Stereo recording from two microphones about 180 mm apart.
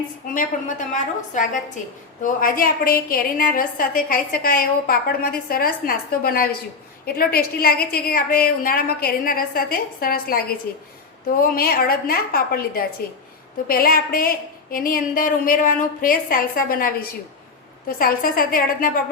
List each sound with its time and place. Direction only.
0.3 s a woman's voice: 45° left (ahead or behind)